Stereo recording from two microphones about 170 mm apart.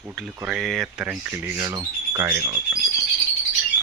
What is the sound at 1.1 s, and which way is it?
Speech, 15° right (ahead or behind).